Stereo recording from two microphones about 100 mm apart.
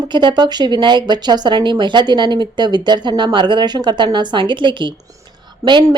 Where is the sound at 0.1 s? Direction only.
50° right (ahead or behind).